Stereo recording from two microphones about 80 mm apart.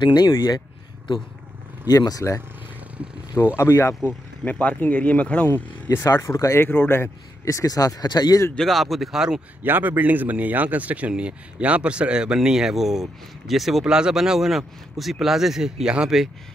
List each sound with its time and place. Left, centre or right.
0.0 s speech: left
1.9 s speech: left
3.5 s speech: left
4.5 s speech: centre
5.9 s speech: left
8.5 s speech: centre
9.6 s a man's voice: right; by 16.3 s centre